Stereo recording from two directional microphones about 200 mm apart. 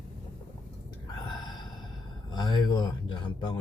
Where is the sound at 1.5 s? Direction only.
20° left (ahead or behind).